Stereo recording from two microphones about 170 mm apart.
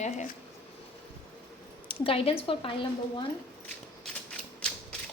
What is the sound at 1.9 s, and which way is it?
Speech, 35° left (ahead or behind).